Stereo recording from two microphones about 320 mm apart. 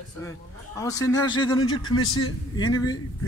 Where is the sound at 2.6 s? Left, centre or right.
Centre.